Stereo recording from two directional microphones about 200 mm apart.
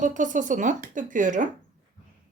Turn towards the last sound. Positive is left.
turn(degrees=-40)  # may be behind; listen again after turning